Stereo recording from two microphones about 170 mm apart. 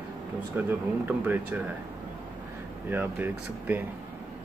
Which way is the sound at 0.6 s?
10° right (ahead or behind).